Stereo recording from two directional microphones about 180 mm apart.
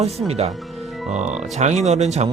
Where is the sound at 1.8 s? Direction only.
40° right (ahead or behind).